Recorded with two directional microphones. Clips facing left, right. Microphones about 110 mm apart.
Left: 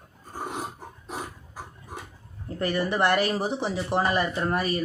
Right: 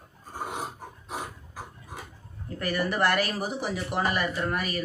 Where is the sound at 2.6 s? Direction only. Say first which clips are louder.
Left 2 dB; 25° left (ahead or behind).